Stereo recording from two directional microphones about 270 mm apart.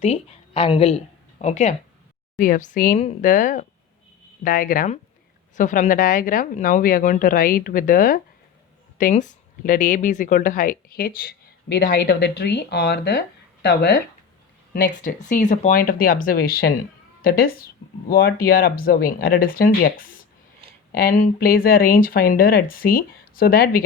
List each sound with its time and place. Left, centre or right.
0.0 s a woman's voice: left